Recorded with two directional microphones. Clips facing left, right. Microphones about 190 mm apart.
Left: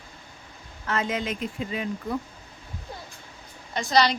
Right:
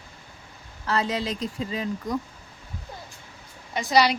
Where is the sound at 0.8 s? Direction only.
35° right (ahead or behind).